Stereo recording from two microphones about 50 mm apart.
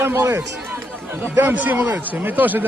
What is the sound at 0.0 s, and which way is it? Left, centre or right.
Speech, right.